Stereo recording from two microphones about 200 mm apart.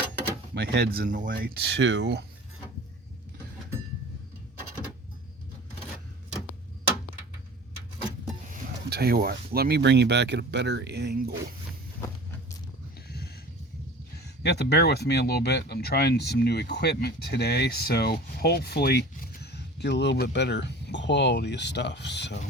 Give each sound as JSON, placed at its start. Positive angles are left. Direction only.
{"t": 0.5, "sound": "speech", "side_deg": -60}
{"t": 8.9, "sound": "speech", "side_deg": -50}
{"t": 13.1, "sound": "a sound", "side_deg": 50}
{"t": 14.4, "sound": "speech", "side_deg": 55}